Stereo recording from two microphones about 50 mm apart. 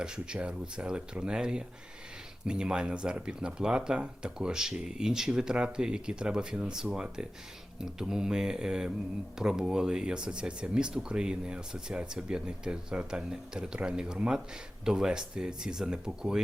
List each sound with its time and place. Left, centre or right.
0.0 s speech: centre